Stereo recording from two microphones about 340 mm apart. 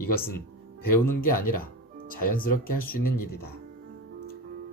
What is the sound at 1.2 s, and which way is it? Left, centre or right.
Speech, left.